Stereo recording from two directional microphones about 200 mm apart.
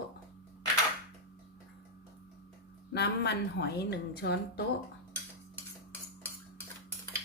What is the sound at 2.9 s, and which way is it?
A woman's voice, 60° left (ahead or behind).